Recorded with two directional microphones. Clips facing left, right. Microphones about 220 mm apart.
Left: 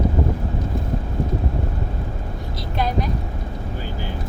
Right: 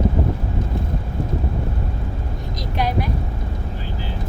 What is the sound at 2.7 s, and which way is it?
Vehicle, 10° right (ahead or behind).